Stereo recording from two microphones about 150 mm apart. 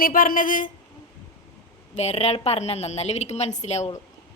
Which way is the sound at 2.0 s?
45° left (ahead or behind).